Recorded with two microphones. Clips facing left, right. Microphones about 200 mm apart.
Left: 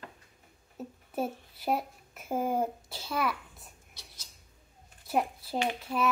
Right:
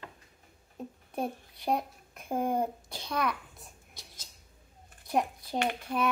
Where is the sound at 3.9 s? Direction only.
50° right (ahead or behind).